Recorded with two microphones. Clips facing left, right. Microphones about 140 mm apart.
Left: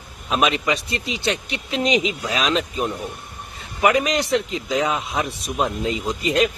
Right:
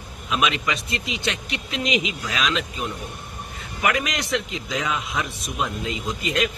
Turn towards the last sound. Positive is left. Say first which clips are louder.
# left 5 dB
turn(degrees=35)  # may be behind; listen again after turning